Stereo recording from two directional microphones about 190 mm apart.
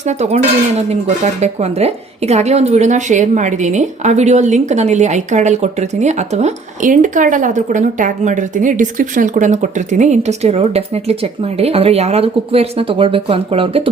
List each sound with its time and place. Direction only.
0.0 s a woman's voice: 35° right (ahead or behind)